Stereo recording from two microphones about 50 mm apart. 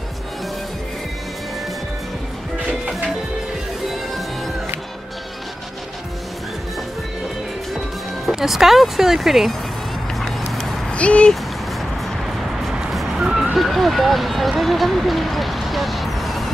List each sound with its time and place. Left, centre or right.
8.3 s speech: centre
10.4 s a sound: centre
10.9 s speech: left
12.6 s music: centre
13.2 s vehicle: centre
14.6 s a sound: centre